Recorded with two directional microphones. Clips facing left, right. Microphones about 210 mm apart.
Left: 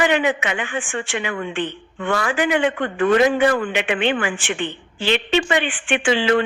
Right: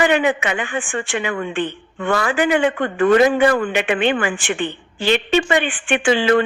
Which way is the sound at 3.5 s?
40° right (ahead or behind).